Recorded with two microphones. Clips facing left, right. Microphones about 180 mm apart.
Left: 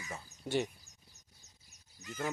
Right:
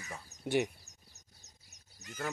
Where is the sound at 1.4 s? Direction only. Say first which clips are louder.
Right 2 dB; 70° right (ahead or behind).